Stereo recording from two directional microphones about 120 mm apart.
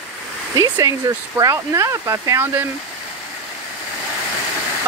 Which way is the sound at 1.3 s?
25° right (ahead or behind).